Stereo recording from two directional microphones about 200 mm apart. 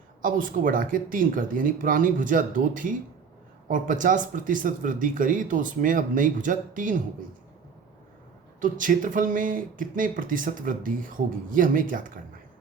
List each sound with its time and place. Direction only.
0.2 s speech: 45° right (ahead or behind)
8.6 s speech: 40° right (ahead or behind)